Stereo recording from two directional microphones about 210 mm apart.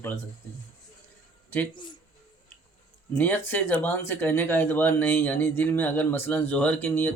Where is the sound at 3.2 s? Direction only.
10° left (ahead or behind).